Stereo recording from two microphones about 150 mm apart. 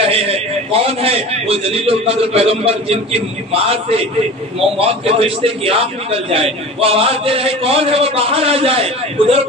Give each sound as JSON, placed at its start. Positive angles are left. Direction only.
{"t": 0.0, "sound": "a man's voice", "side_deg": -40}